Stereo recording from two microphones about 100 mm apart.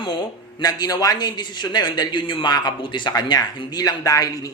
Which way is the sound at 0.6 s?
40° left (ahead or behind).